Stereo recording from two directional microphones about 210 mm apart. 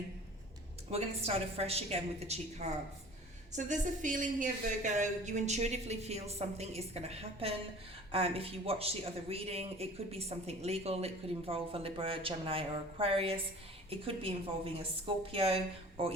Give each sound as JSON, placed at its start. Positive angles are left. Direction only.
{"t": 0.9, "sound": "a woman's voice", "side_deg": -30}